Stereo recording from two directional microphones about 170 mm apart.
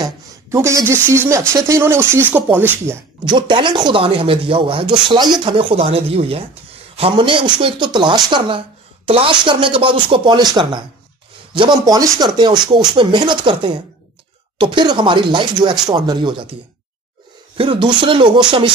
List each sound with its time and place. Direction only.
0.0 s a sound: 15° right (ahead or behind)
1.1 s speech: 15° right (ahead or behind)
3.3 s a woman's voice: 30° right (ahead or behind)
17.6 s a woman's voice: 30° right (ahead or behind)